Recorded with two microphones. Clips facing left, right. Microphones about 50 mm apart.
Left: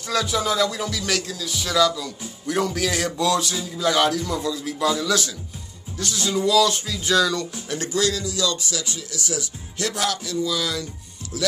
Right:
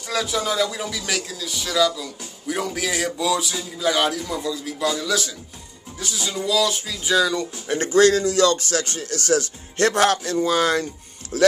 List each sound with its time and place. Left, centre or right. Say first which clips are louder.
0.1 s speech: left 1 dB; centre
7.6 s a man's voice: right 9 dB; right